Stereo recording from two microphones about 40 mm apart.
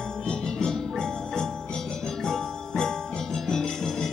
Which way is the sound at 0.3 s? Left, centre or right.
Centre.